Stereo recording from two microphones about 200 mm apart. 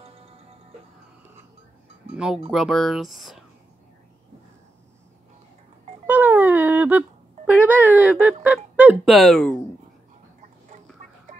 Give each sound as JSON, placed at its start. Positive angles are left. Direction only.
{"t": 0.0, "sound": "music", "side_deg": -30}
{"t": 2.1, "sound": "speech", "side_deg": -5}
{"t": 6.0, "sound": "a sound", "side_deg": -10}